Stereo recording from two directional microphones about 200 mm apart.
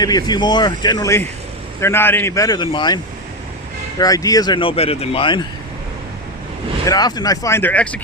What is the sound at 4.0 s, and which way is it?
Speech, 15° left (ahead or behind).